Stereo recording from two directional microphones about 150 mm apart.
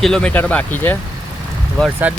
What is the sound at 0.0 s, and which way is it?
Speech, 5° left (ahead or behind).